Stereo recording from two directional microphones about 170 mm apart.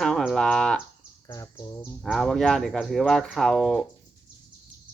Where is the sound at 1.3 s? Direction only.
20° left (ahead or behind).